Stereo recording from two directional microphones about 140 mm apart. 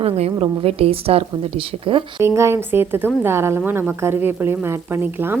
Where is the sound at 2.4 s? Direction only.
20° right (ahead or behind).